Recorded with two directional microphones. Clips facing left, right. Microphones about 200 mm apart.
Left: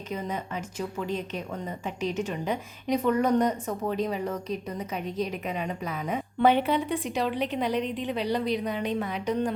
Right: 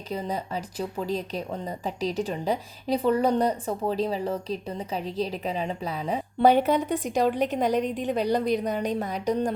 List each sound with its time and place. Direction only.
0.1 s a woman's voice: 35° right (ahead or behind)